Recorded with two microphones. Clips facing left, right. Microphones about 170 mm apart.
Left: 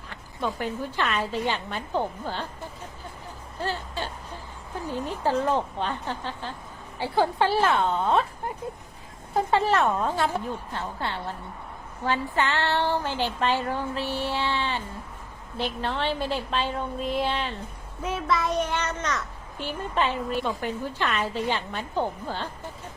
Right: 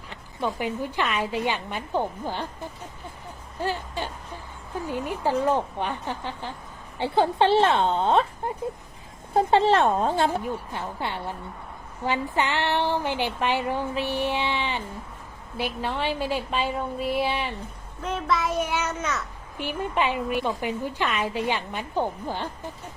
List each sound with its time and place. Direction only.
0.1 s a child's voice: 15° right (ahead or behind)
3.6 s a child's voice: 15° right (ahead or behind); by 10.3 s 30° right (ahead or behind)
10.7 s a child's voice: 15° right (ahead or behind)
18.0 s a child's voice: 5° left (ahead or behind); by 22.4 s 15° right (ahead or behind)